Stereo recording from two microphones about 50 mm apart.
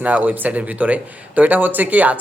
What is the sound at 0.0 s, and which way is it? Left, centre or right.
Speech, right.